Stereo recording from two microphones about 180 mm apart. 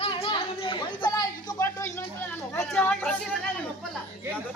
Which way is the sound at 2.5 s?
10° left (ahead or behind).